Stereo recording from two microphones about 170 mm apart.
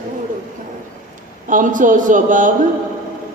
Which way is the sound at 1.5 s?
50° right (ahead or behind).